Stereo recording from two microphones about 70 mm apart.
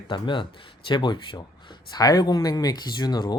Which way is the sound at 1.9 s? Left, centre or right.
Left.